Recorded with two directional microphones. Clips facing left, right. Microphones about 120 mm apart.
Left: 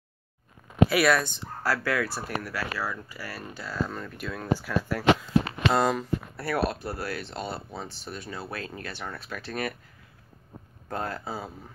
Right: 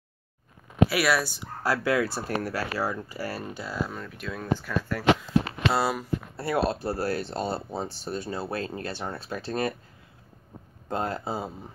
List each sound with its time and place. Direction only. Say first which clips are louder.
0.8 s speech: left 2 dB; centre (ahead or behind)
1.6 s speech: right 3 dB; 20° right (ahead or behind)
3.5 s speech: even; 15° right (ahead or behind)
3.9 s speech: left 1 dB; centre (ahead or behind)
6.3 s speech: right 3 dB; 25° right (ahead or behind)
10.9 s speech: right 3 dB; 25° right (ahead or behind)